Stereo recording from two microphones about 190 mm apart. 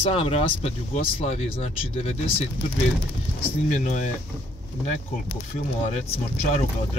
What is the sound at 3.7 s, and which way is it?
Speech, 40° left (ahead or behind).